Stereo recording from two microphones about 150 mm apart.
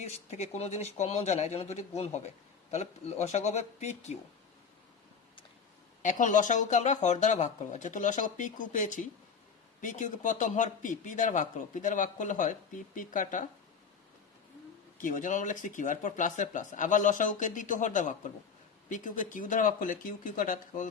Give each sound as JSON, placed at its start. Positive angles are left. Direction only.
{"t": 0.0, "sound": "speech", "side_deg": 50}
{"t": 6.0, "sound": "speech", "side_deg": 55}
{"t": 15.0, "sound": "speech", "side_deg": 60}